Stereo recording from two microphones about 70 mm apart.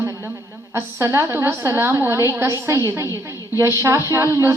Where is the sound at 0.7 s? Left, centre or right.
Right.